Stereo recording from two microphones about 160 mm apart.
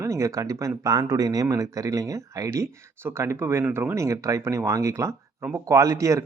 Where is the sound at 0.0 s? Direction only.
20° right (ahead or behind).